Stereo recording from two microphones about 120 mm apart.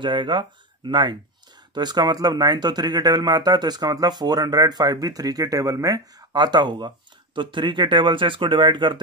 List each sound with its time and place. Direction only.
0.0 s speech: 40° right (ahead or behind)